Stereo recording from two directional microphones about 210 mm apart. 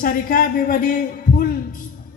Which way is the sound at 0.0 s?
40° left (ahead or behind).